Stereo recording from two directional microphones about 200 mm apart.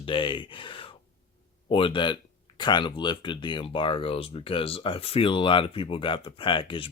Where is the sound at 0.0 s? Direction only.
25° left (ahead or behind).